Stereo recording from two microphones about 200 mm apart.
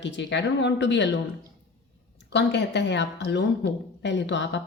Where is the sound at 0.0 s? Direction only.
60° left (ahead or behind).